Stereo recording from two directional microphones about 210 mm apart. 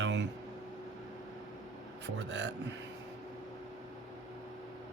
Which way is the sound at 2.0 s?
60° right (ahead or behind).